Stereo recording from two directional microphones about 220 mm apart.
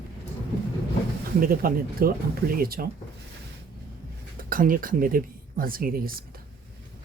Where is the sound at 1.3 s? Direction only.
40° right (ahead or behind).